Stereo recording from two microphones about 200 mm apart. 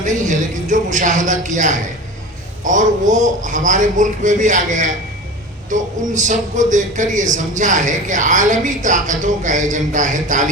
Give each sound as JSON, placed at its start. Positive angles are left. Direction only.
{"t": 0.0, "sound": "a man's voice", "side_deg": -40}